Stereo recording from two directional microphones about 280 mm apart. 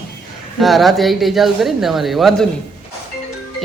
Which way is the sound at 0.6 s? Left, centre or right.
Centre.